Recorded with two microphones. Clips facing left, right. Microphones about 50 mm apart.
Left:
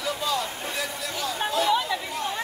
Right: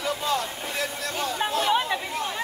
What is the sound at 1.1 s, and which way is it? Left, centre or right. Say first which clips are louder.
Chatter: even; right.